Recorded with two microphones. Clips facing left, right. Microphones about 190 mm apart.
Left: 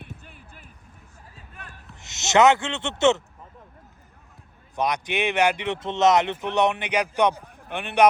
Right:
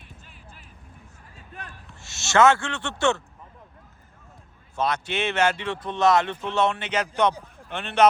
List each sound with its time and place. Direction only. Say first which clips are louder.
0.0 s a sound: left 6 dB; 55° left (ahead or behind)
2.0 s speech: left 1 dB; 20° left (ahead or behind)
4.8 s speech: left 1 dB; 15° left (ahead or behind)